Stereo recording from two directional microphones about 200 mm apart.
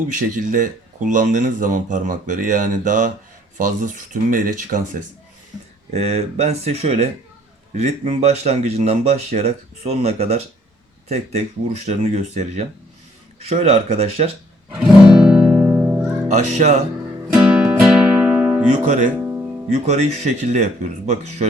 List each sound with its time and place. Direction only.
0.1 s speech: 40° right (ahead or behind)
14.8 s music: 5° right (ahead or behind)
16.3 s speech: 35° right (ahead or behind)
17.3 s music: 10° right (ahead or behind)
18.7 s speech: 40° right (ahead or behind)